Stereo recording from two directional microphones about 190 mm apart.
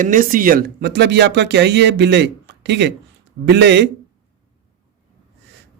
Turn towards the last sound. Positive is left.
turn(degrees=-65)  # may be behind; listen again after turning